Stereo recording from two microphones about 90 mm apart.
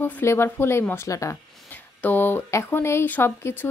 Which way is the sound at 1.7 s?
20° left (ahead or behind).